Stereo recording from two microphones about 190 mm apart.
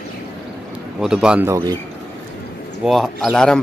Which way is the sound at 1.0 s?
5° right (ahead or behind).